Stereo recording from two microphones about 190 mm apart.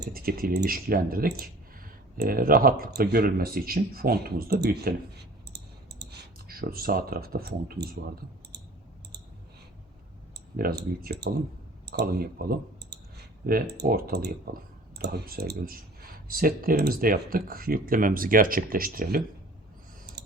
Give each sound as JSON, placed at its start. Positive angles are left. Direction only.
{"t": 0.0, "sound": "speech", "side_deg": -50}
{"t": 10.6, "sound": "speech", "side_deg": -50}
{"t": 20.2, "sound": "scissors", "side_deg": -60}